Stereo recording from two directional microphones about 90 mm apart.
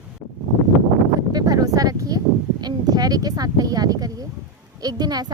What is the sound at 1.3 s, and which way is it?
Speech, 45° right (ahead or behind).